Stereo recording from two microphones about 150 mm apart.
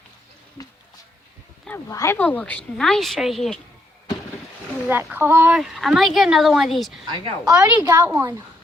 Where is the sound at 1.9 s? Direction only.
20° left (ahead or behind); by 3.6 s centre (ahead or behind).